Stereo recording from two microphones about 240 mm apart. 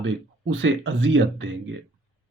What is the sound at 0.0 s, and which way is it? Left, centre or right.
Speech, right.